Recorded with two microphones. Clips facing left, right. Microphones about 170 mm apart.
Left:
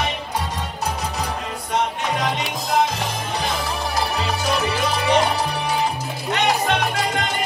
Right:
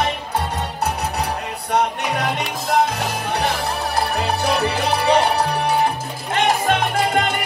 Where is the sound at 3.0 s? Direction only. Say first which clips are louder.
Right 3 dB; 65° right (ahead or behind).